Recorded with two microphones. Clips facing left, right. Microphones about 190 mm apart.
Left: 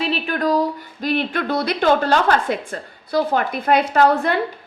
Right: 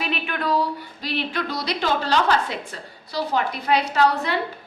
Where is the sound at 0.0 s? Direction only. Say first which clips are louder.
Left 5 dB; 35° left (ahead or behind).